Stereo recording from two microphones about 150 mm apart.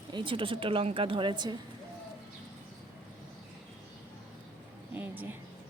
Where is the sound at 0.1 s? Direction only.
35° right (ahead or behind).